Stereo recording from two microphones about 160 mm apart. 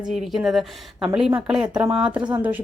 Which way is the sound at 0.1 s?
Centre (ahead or behind).